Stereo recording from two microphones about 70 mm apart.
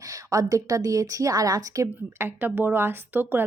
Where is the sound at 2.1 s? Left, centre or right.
Right.